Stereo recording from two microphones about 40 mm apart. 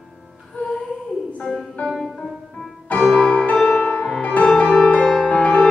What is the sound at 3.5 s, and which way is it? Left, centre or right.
Music, centre.